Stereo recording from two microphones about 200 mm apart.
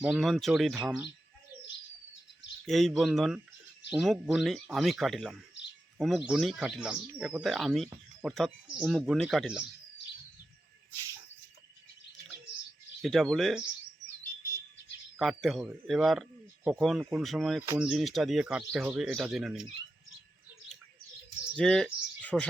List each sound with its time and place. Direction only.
0.0 s a man's voice: centre (ahead or behind)
2.6 s a man's voice: centre (ahead or behind)
13.0 s a man's voice: centre (ahead or behind)
14.4 s bird: 45° left (ahead or behind)
15.2 s a man's voice: centre (ahead or behind)
21.5 s speech: 5° left (ahead or behind)